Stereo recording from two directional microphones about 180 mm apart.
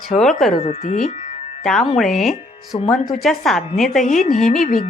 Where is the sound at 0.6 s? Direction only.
40° left (ahead or behind).